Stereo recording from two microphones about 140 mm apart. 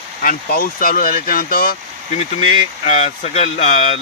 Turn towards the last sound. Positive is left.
turn(degrees=50)  # may be behind; listen again after turning